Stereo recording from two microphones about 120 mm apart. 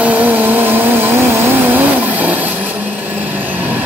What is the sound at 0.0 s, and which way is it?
Vehicle, 15° right (ahead or behind).